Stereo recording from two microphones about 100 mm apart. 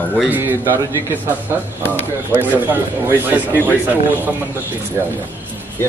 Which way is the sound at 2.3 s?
20° right (ahead or behind).